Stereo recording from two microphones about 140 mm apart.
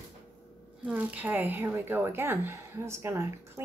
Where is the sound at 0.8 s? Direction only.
10° right (ahead or behind).